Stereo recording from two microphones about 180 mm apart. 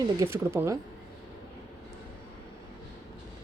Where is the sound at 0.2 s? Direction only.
15° right (ahead or behind).